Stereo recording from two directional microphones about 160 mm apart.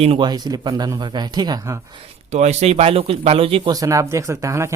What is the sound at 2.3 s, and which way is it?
Speech, 45° right (ahead or behind).